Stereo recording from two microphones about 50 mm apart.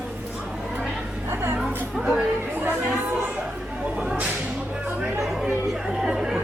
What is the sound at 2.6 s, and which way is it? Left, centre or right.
Speech, right.